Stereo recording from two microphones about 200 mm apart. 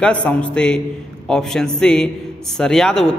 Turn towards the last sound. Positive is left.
turn(degrees=5)  # may be behind; listen again after turning